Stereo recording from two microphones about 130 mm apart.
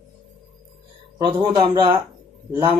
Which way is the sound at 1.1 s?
30° right (ahead or behind).